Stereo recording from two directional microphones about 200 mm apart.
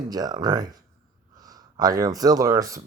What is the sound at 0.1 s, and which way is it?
Speech, 20° right (ahead or behind).